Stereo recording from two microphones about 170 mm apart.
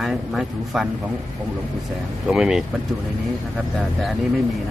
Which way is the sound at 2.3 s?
5° right (ahead or behind).